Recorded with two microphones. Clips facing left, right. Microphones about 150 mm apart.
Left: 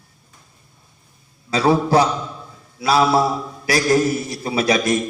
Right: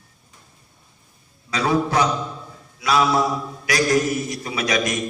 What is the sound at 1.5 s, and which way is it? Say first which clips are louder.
A man's voice: left 5 dB; 30° left (ahead or behind).